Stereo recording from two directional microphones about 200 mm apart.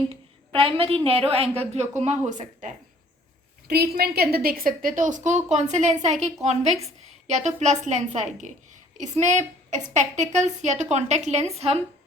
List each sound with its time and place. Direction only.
0.1 s a woman's voice: 30° right (ahead or behind)
3.7 s a woman's voice: 50° right (ahead or behind); by 11.8 s 30° right (ahead or behind)